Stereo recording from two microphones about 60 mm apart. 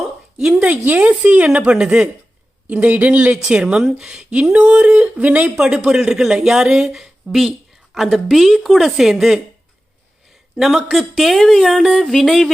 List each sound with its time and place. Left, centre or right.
0.3 s speech: centre
0.7 s speech: right; by 9.4 s centre
10.6 s speech: centre